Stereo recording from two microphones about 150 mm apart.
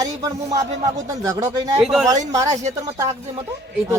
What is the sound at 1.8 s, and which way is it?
Speech, centre (ahead or behind).